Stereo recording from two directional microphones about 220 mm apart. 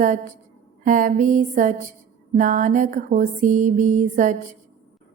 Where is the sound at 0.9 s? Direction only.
35° right (ahead or behind).